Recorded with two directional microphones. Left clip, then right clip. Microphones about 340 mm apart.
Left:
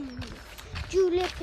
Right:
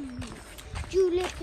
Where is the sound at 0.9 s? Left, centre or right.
Left.